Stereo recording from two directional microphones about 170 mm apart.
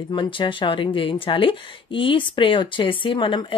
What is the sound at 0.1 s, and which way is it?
A woman's voice, 30° left (ahead or behind).